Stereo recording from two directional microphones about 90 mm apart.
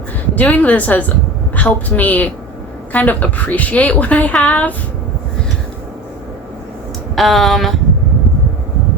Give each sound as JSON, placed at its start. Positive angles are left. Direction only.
{"t": 0.3, "sound": "a woman's voice", "side_deg": 15}
{"t": 7.2, "sound": "speech", "side_deg": 0}